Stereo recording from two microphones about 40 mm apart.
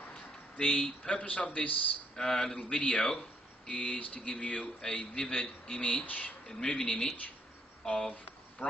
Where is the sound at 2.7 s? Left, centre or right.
Left.